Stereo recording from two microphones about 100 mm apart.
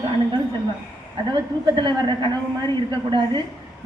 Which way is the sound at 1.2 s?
50° right (ahead or behind).